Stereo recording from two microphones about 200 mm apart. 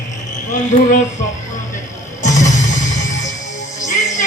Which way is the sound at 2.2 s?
35° left (ahead or behind).